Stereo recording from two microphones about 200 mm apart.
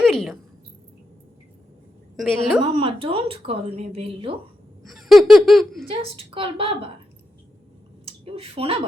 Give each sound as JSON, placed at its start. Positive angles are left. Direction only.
{"t": 0.0, "sound": "a sound", "side_deg": 0}
{"t": 2.1, "sound": "a woman's voice", "side_deg": 0}
{"t": 2.6, "sound": "a woman's voice", "side_deg": -25}
{"t": 4.8, "sound": "a sound", "side_deg": 0}
{"t": 5.9, "sound": "a woman's voice", "side_deg": -25}
{"t": 8.0, "sound": "speech", "side_deg": -30}